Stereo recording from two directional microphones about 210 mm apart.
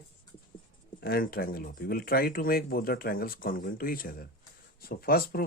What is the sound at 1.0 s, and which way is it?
Speech, 45° left (ahead or behind).